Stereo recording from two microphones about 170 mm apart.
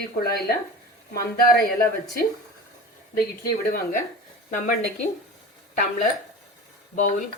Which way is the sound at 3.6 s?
60° left (ahead or behind).